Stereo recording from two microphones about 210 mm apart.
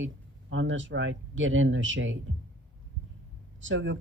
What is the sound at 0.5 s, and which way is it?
Speech, 65° right (ahead or behind).